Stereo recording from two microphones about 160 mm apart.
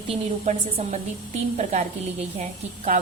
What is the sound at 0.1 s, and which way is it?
A woman's voice, 45° right (ahead or behind).